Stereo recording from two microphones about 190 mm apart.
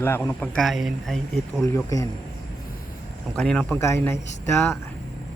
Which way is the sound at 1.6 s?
15° left (ahead or behind).